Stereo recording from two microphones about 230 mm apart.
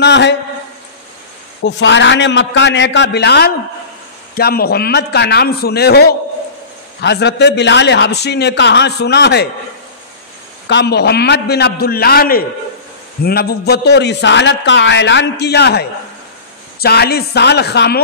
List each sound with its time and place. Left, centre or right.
0.0 s a man's voice: left
1.6 s a man's voice: left
10.7 s a man's voice: left